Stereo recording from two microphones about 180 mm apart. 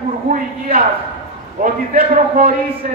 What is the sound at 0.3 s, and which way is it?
Speech, 55° right (ahead or behind).